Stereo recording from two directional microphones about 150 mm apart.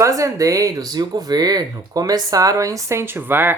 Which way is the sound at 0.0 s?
20° right (ahead or behind).